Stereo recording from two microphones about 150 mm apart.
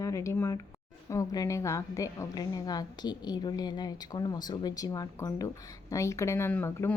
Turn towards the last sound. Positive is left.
turn(degrees=15)  # may be behind; listen again after turning